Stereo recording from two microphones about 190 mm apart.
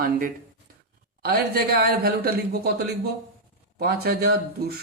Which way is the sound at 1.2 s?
55° right (ahead or behind).